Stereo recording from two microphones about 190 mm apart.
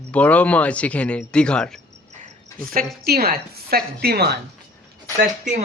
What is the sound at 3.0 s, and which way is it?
A woman's voice, 55° right (ahead or behind).